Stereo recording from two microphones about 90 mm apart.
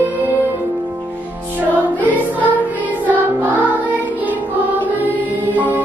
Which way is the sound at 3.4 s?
15° right (ahead or behind).